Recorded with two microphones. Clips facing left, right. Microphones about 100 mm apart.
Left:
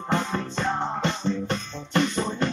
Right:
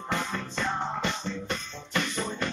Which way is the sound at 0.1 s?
30° left (ahead or behind).